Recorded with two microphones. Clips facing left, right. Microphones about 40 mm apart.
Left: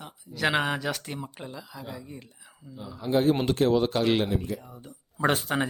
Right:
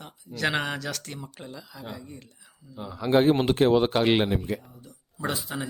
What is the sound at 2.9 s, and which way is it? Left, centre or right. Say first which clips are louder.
Speech: right 4 dB; right.